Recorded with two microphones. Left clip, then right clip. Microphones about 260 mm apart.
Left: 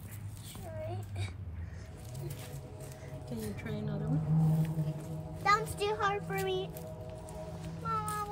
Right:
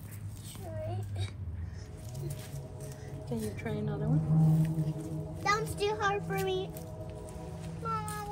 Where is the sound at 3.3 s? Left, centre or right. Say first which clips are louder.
Right 4 dB; right.